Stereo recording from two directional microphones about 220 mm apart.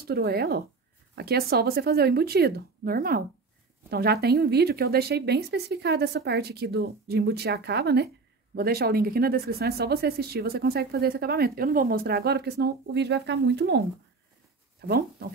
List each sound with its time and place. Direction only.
0.0 s speech: 45° right (ahead or behind)
14.9 s speech: 45° right (ahead or behind)